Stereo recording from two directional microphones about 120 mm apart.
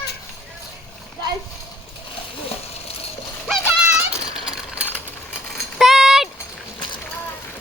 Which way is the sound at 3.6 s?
10° right (ahead or behind).